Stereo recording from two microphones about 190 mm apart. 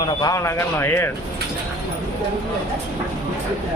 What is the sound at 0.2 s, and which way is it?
Speech, 20° left (ahead or behind).